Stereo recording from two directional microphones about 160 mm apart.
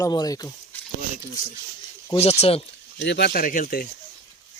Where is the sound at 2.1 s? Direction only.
40° left (ahead or behind).